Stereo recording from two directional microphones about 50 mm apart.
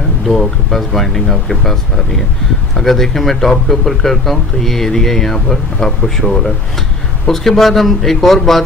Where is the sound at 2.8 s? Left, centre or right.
Centre.